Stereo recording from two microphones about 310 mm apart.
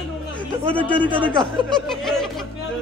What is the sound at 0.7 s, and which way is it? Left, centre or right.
A man's voice, centre.